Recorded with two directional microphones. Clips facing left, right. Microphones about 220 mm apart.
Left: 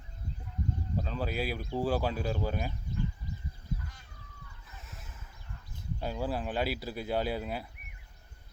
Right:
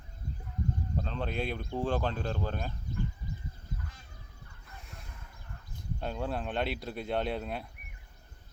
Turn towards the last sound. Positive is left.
turn(degrees=5)  # may be behind; listen again after turning